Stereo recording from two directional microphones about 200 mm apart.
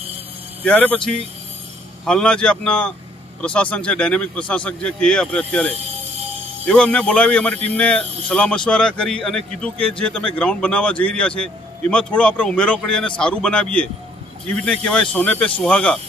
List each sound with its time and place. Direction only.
0.7 s speech: 5° left (ahead or behind)
5.8 s a sound: 30° right (ahead or behind)
6.7 s speech: 5° left (ahead or behind)